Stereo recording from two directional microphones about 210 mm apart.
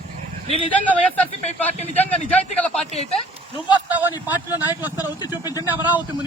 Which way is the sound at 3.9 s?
5° right (ahead or behind).